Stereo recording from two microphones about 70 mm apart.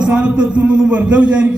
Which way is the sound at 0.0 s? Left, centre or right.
Centre.